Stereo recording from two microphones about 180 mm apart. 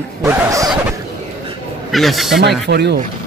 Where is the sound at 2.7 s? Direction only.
70° right (ahead or behind).